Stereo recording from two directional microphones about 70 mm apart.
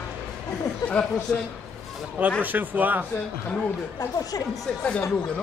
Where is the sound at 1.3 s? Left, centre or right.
Centre.